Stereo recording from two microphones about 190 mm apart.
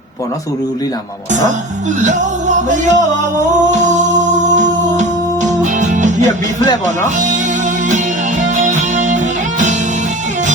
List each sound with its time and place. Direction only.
2.0 s music: 40° right (ahead or behind)
8.5 s music: 40° right (ahead or behind)